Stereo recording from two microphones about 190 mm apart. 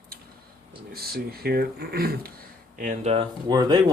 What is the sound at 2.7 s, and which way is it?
Speech, 40° right (ahead or behind).